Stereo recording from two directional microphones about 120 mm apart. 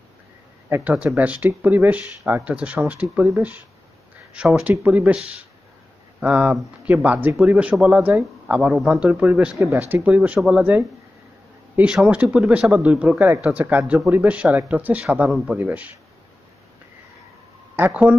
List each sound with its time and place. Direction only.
0.7 s speech: 15° right (ahead or behind)
9.6 s speech: 25° right (ahead or behind)
10.0 s speech: 10° right (ahead or behind)
17.7 s speech: 10° right (ahead or behind)